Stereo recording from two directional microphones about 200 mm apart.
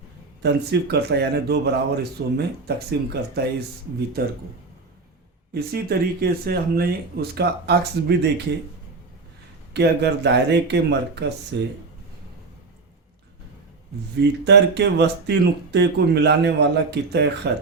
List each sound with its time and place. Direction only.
0.4 s speech: 55° right (ahead or behind)
5.5 s speech: 50° right (ahead or behind)
9.7 s speech: 55° right (ahead or behind)
14.2 s speech: 55° right (ahead or behind)